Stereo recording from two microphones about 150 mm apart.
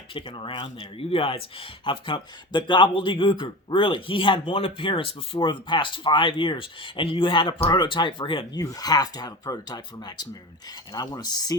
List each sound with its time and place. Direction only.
0.1 s speech: 35° left (ahead or behind)